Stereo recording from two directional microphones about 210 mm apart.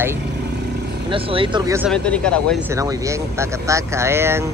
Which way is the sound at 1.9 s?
5° left (ahead or behind).